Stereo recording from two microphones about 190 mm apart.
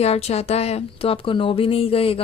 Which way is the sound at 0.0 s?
35° left (ahead or behind).